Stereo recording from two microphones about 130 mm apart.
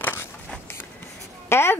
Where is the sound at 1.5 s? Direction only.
20° left (ahead or behind).